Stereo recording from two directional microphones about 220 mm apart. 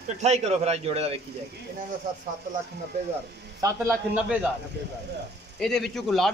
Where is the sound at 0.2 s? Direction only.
30° right (ahead or behind).